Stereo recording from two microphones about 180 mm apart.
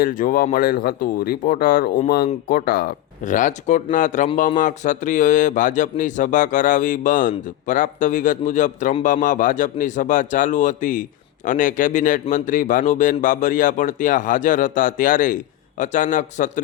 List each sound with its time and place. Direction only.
0.0 s a man's voice: 50° left (ahead or behind)